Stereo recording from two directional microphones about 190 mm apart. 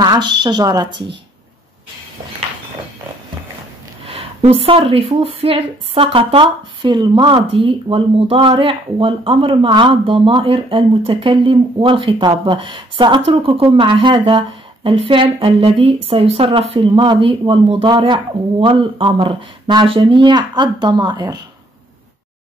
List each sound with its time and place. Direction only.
0.0 s speech: 20° right (ahead or behind)
4.1 s speech: 30° right (ahead or behind)